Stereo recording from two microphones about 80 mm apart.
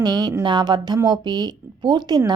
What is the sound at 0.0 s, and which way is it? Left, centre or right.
Speech, right.